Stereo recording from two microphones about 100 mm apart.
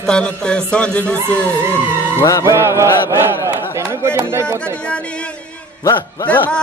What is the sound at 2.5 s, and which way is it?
Chant, 30° right (ahead or behind).